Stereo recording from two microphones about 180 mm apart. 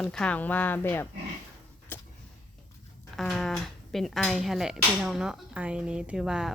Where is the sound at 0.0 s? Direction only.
5° left (ahead or behind).